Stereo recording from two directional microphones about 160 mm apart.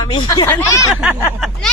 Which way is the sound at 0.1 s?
30° left (ahead or behind).